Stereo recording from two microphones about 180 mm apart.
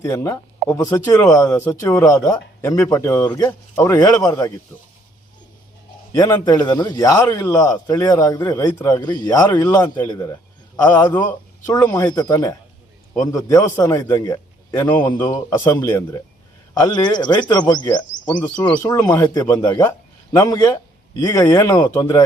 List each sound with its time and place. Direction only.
0.0 s speech: 15° left (ahead or behind)
6.1 s a man's voice: 20° left (ahead or behind)